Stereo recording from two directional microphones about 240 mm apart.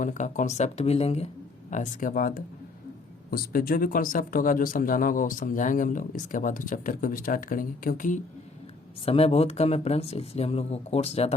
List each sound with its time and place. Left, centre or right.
0.0 s speech: left